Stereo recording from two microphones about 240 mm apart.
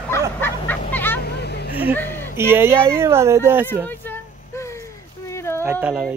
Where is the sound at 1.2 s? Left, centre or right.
Left.